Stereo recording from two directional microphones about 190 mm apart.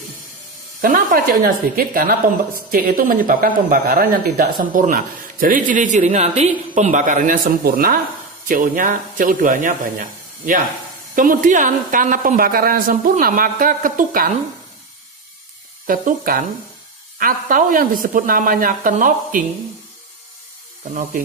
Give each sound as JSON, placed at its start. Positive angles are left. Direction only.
{"t": 0.7, "sound": "speech", "side_deg": -50}
{"t": 15.9, "sound": "speech", "side_deg": -45}
{"t": 20.9, "sound": "speech", "side_deg": -50}